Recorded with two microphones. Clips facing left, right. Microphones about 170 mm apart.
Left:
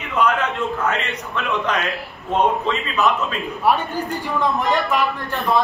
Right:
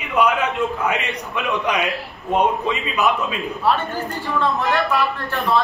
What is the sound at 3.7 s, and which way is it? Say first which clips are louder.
Speech: left 2 dB; 15° left (ahead or behind).